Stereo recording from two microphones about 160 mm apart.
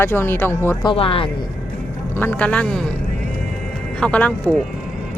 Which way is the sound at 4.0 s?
10° left (ahead or behind).